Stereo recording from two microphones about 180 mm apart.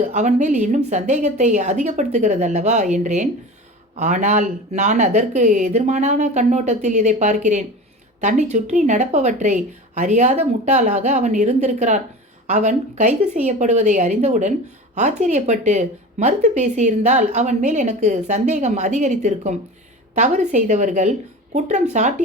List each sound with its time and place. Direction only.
0.0 s speech: 40° right (ahead or behind)